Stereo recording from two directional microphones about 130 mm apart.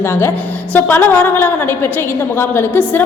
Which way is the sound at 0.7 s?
15° left (ahead or behind).